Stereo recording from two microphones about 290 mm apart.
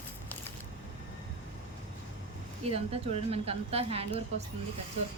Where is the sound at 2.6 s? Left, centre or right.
Right.